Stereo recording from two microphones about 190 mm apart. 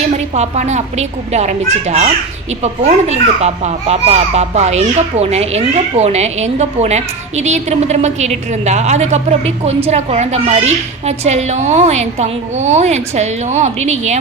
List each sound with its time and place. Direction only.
0.1 s a child's voice: 35° right (ahead or behind)